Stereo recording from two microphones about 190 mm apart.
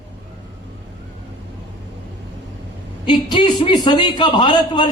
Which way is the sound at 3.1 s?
25° left (ahead or behind).